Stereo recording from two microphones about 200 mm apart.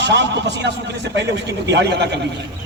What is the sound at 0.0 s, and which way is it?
A man's voice, 60° right (ahead or behind).